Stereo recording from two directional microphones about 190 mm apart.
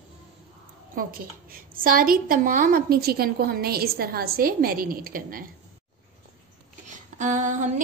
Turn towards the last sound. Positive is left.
turn(degrees=-40)  # may be behind; listen again after turning